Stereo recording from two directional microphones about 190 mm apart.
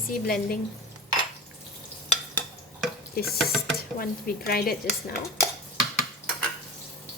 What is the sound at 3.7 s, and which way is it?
Speech, 50° left (ahead or behind).